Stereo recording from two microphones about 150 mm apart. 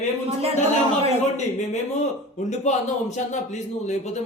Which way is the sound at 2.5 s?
50° left (ahead or behind).